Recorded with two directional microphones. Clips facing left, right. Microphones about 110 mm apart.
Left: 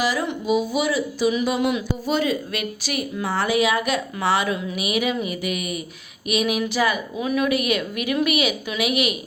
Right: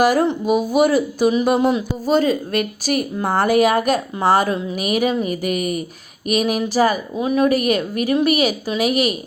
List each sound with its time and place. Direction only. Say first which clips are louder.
0.0 s a woman's voice: right 8 dB; 50° right (ahead or behind)